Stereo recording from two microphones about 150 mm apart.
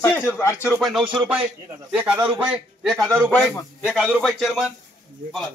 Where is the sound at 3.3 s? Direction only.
10° left (ahead or behind).